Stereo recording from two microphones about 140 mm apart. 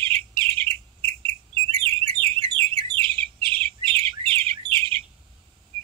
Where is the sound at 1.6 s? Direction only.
40° right (ahead or behind).